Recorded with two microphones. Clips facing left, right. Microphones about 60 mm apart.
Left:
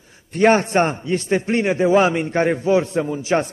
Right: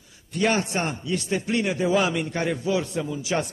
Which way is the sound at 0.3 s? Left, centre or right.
Left.